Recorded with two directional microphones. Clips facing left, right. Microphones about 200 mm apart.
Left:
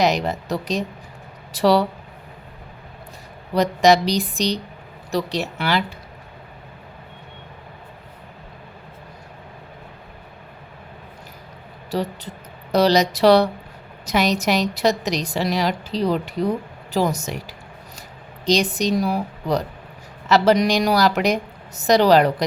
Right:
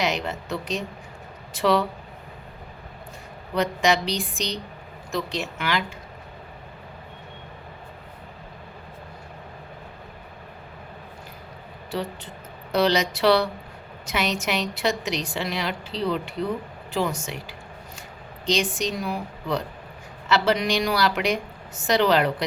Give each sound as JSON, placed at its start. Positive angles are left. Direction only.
{"t": 0.0, "sound": "a woman's voice", "side_deg": 40}
{"t": 3.5, "sound": "a woman's voice", "side_deg": 40}
{"t": 11.9, "sound": "a woman's voice", "side_deg": 40}